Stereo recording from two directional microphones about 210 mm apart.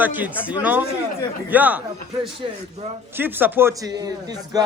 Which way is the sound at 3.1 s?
10° right (ahead or behind).